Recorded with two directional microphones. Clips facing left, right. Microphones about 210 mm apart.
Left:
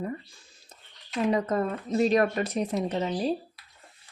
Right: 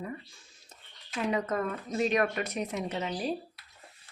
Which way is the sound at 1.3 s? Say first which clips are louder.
Left 4 dB; 30° left (ahead or behind).